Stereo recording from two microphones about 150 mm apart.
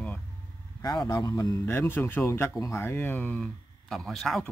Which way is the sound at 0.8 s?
25° left (ahead or behind).